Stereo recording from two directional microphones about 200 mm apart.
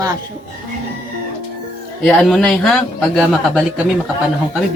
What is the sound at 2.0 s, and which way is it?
A man's voice, centre (ahead or behind).